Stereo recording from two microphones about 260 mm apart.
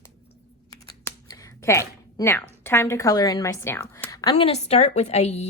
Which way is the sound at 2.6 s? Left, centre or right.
Centre.